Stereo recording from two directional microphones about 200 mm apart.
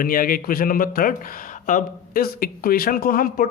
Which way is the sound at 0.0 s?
45° left (ahead or behind).